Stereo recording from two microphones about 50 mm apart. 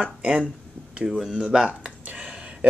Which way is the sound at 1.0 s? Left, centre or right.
Centre.